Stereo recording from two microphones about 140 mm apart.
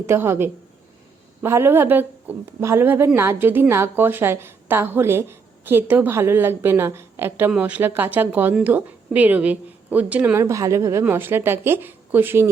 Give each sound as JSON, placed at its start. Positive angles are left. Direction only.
{"t": 0.0, "sound": "a woman's voice", "side_deg": -20}